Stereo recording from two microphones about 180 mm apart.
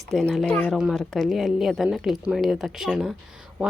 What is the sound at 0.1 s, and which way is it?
A woman's voice, centre (ahead or behind).